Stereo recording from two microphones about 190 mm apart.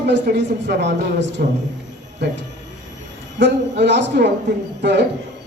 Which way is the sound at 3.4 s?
65° right (ahead or behind).